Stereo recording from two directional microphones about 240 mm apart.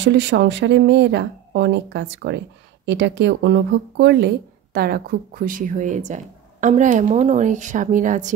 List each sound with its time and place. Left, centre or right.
0.0 s speech: right